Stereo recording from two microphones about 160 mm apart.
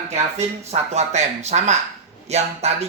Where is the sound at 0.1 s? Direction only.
45° right (ahead or behind).